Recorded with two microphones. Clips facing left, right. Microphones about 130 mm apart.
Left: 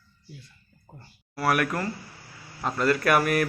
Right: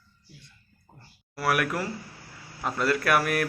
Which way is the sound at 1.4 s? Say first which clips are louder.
Left 1 dB; centre (ahead or behind).